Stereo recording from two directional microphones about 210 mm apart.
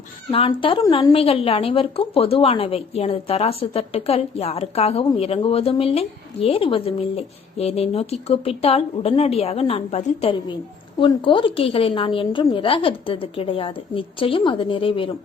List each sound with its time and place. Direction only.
0.3 s a woman's voice: 25° left (ahead or behind)